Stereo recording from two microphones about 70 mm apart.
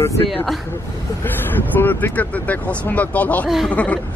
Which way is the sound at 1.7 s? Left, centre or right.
Left.